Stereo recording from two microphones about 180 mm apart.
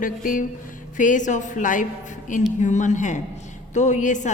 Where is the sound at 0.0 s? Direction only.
50° left (ahead or behind).